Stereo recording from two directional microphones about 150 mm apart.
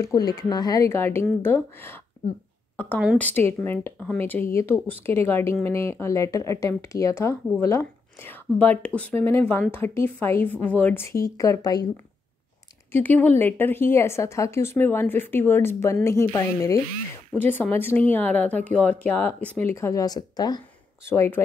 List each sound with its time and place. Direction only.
0.0 s a woman's voice: 25° left (ahead or behind)
3.2 s speech: 10° left (ahead or behind)
12.9 s speech: 10° left (ahead or behind)